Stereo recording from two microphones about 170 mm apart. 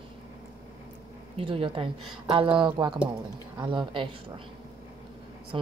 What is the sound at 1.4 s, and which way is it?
A woman's voice, 30° right (ahead or behind).